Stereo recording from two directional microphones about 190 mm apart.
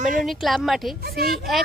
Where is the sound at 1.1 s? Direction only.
55° right (ahead or behind).